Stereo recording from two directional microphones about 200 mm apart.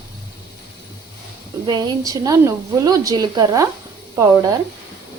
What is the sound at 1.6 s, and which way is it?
A woman's voice, 20° right (ahead or behind).